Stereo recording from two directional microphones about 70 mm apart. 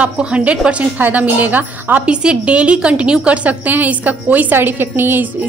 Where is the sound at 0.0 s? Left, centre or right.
Centre.